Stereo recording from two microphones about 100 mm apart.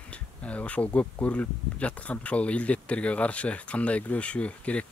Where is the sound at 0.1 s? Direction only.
15° left (ahead or behind).